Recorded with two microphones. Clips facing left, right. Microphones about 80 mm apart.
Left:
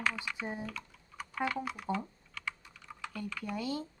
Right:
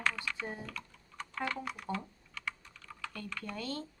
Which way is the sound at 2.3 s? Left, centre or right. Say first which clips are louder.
Even; centre.